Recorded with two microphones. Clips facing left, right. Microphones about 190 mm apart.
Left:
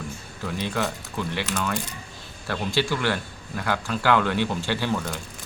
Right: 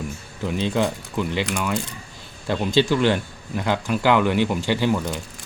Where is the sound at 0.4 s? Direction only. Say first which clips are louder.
Right 5 dB; 20° right (ahead or behind).